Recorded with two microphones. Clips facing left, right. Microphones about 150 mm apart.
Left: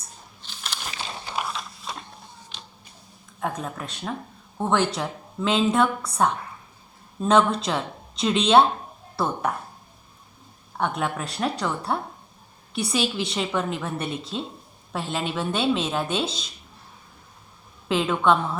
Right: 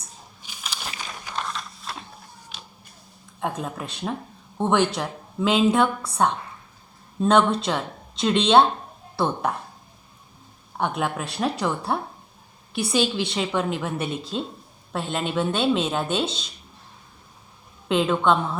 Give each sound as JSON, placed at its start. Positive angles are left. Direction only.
{"t": 0.4, "sound": "a sound", "side_deg": -5}
{"t": 1.3, "sound": "music", "side_deg": 10}
{"t": 3.4, "sound": "a woman's voice", "side_deg": 0}
{"t": 10.8, "sound": "a woman's voice", "side_deg": -5}
{"t": 17.8, "sound": "a woman's voice", "side_deg": 0}